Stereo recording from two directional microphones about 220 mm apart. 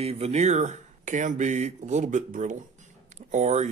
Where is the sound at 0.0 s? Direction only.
30° right (ahead or behind).